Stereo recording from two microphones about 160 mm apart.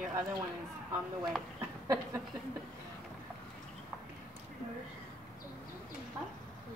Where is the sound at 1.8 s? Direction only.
20° right (ahead or behind).